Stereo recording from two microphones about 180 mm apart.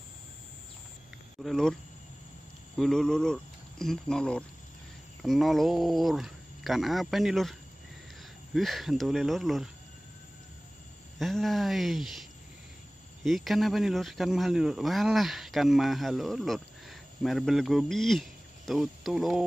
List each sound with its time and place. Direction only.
1.4 s speech: centre (ahead or behind)
2.8 s speech: 5° left (ahead or behind)
8.5 s speech: centre (ahead or behind)
11.1 s speech: centre (ahead or behind)